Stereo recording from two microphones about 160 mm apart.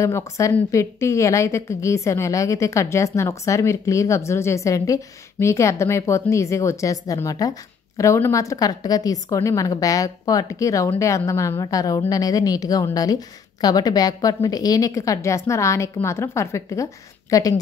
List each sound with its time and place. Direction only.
0.0 s a woman's voice: 20° left (ahead or behind)